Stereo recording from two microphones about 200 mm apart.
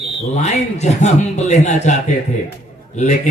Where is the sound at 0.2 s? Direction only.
35° left (ahead or behind).